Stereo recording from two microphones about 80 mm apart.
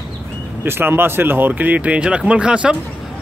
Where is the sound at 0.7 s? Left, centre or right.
Right.